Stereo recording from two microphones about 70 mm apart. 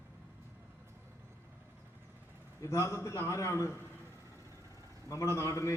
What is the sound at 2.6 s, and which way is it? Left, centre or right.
A man's voice, left.